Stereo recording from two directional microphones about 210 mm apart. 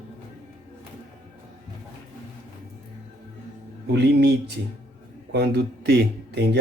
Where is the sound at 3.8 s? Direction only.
50° right (ahead or behind).